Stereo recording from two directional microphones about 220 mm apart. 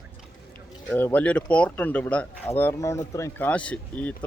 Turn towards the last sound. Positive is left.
turn(degrees=5)  # may be behind; listen again after turning